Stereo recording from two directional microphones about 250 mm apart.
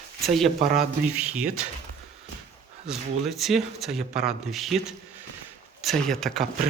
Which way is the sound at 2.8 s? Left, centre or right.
Centre.